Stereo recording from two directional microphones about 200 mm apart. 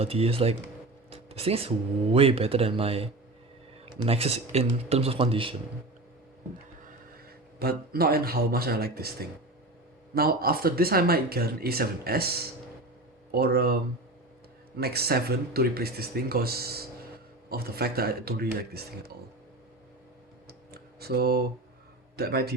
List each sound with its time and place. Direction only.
0.0 s speech: 30° right (ahead or behind)
1.1 s a sound: 30° right (ahead or behind)
2.1 s speech: 30° right (ahead or behind)
7.6 s speech: 50° right (ahead or behind)
10.2 s speech: 50° right (ahead or behind)
14.8 s speech: 50° right (ahead or behind)
21.0 s speech: 50° right (ahead or behind)